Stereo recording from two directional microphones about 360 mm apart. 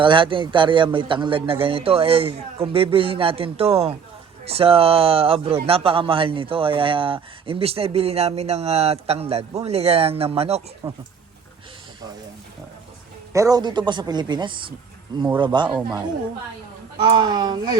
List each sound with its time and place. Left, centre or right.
0.0 s speech: centre
13.3 s speech: centre
17.0 s speech: centre